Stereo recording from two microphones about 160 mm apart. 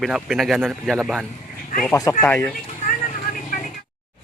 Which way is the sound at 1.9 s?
20° left (ahead or behind).